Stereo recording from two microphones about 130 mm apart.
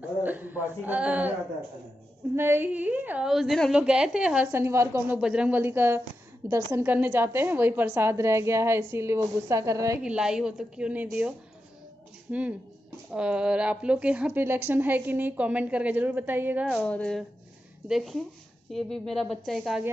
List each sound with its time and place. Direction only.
0.2 s a man's voice: 15° right (ahead or behind)
2.3 s a woman's voice: 20° right (ahead or behind)
4.5 s a woman's voice: 20° right (ahead or behind)
5.2 s a woman's voice: 5° right (ahead or behind); by 9.9 s 25° right (ahead or behind)
10.0 s a woman's voice: 5° right (ahead or behind)
12.3 s a woman's voice: 10° right (ahead or behind)
16.7 s a woman's voice: 5° left (ahead or behind)